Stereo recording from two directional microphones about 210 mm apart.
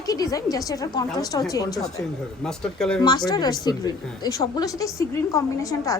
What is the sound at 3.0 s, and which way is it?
A woman's voice, 20° left (ahead or behind).